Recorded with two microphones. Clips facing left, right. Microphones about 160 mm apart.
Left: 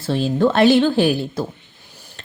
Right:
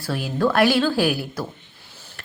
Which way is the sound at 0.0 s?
25° left (ahead or behind).